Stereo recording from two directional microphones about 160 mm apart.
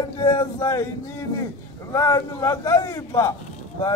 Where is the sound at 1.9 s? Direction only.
20° left (ahead or behind).